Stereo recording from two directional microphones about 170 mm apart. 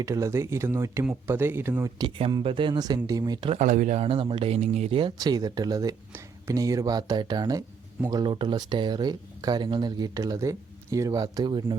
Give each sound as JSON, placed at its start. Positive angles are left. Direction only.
{"t": 0.0, "sound": "speech", "side_deg": -15}
{"t": 2.0, "sound": "speech", "side_deg": -30}
{"t": 3.5, "sound": "speech", "side_deg": -45}